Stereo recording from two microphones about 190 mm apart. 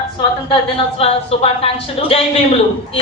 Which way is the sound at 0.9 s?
30° left (ahead or behind).